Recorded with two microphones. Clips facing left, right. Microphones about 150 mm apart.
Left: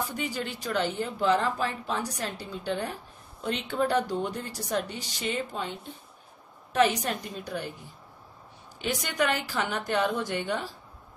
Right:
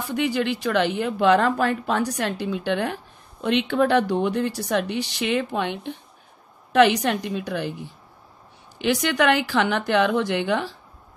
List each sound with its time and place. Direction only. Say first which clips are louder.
0.1 s a woman's voice: right 10 dB; 80° right
8.7 s a woman's voice: right 7 dB; 90° right